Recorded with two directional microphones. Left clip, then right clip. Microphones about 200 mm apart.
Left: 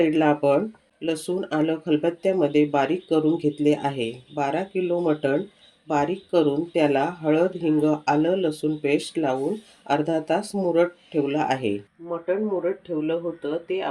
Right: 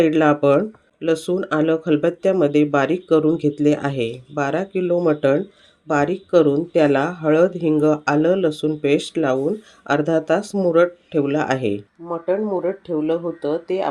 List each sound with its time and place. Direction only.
0.0 s speech: 40° right (ahead or behind)